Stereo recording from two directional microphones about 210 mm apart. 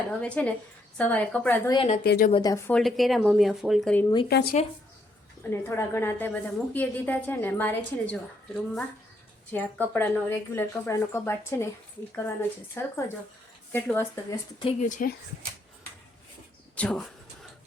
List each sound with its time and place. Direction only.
0.1 s a woman's voice: 5° left (ahead or behind)
1.7 s a woman's voice: 25° left (ahead or behind)
2.0 s speech: 45° left (ahead or behind)
2.3 s a woman's voice: 15° left (ahead or behind)
2.7 s speech: centre (ahead or behind)
4.3 s speech: 50° left (ahead or behind)
5.4 s a woman's voice: 10° left (ahead or behind)
12.8 s a woman's voice: 10° left (ahead or behind)
14.6 s a woman's voice: 30° left (ahead or behind)
16.7 s speech: 5° left (ahead or behind)